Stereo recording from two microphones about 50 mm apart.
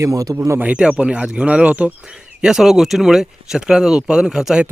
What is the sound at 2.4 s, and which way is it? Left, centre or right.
Speech, centre.